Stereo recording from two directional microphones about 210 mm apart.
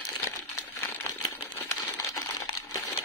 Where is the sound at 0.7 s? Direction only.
15° left (ahead or behind).